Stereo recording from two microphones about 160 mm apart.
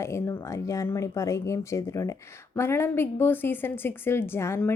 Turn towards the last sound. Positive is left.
turn(degrees=15)  # may be behind; listen again after turning